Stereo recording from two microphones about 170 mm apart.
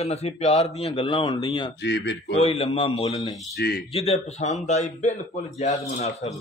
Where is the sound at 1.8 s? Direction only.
90° left.